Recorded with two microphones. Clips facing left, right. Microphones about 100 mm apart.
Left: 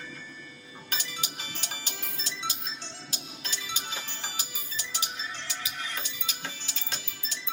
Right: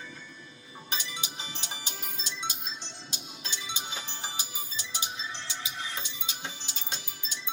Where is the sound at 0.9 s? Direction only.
20° right (ahead or behind).